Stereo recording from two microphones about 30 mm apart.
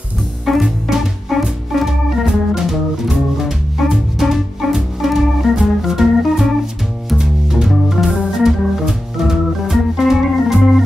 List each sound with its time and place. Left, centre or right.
0.5 s music: centre
1.3 s music: centre
1.9 s organ: centre
7.2 s music: centre
7.9 s organ: centre